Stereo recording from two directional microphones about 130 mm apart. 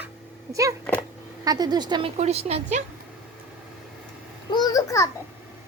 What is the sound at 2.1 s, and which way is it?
Speech, 55° right (ahead or behind).